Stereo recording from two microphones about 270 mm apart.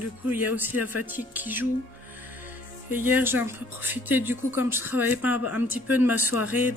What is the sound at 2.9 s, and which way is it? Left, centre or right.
Speech, centre.